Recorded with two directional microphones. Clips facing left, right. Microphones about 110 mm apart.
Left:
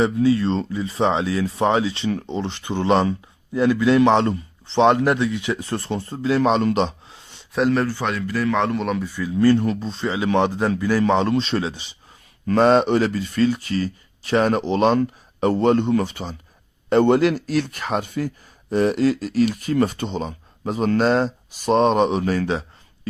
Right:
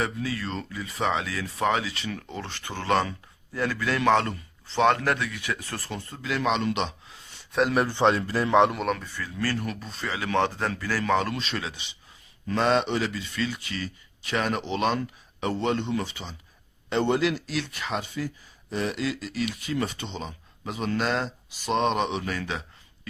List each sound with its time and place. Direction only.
0.0 s speech: 25° left (ahead or behind)
7.7 s speech: 15° right (ahead or behind)
7.9 s speech: 25° right (ahead or behind)
8.7 s a man's voice: centre (ahead or behind)
9.0 s speech: 15° left (ahead or behind); by 11.9 s 35° left (ahead or behind)
12.5 s speech: 45° left (ahead or behind)